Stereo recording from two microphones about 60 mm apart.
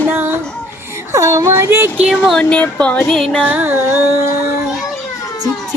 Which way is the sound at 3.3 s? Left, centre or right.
Right.